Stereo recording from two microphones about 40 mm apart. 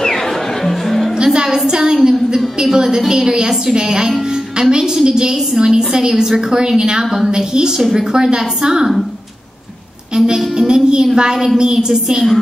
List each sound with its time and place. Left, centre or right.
0.7 s music: centre
1.1 s music: centre
1.7 s a woman's voice: centre
10.1 s music: centre
10.7 s a woman's voice: centre